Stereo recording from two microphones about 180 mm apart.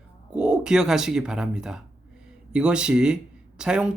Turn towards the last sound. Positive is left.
turn(degrees=-5)  # may be behind; listen again after turning